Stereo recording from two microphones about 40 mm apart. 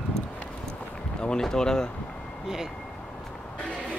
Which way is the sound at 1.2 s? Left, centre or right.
Centre.